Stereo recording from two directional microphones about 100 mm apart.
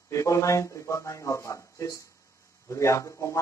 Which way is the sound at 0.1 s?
30° left (ahead or behind).